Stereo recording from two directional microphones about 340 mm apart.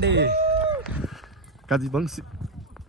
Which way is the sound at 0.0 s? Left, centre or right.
Right.